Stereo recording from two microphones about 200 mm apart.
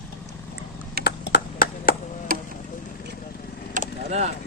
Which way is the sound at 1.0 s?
50° left (ahead or behind).